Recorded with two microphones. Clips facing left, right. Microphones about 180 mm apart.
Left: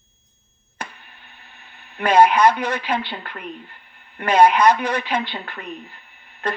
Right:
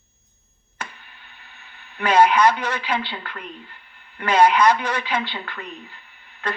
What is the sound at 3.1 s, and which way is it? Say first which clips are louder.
Speech: left 2 dB; 50° left (ahead or behind).